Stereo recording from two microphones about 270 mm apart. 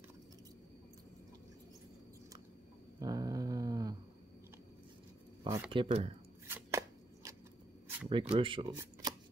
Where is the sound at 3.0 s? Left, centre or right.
Centre.